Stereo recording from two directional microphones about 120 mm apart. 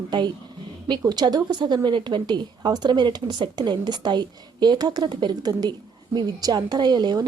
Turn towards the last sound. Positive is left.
turn(degrees=-35)  # may be behind; listen again after turning